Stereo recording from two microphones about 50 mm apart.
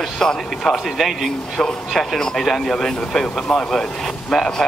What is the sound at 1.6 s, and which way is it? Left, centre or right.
Speech, centre.